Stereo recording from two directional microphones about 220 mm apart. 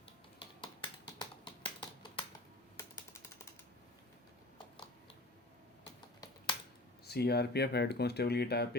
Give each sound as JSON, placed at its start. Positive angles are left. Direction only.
{"t": 1.2, "sound": "a sound", "side_deg": 20}
{"t": 2.7, "sound": "typing", "side_deg": 10}
{"t": 6.1, "sound": "typing", "side_deg": 25}
{"t": 7.1, "sound": "speech", "side_deg": 45}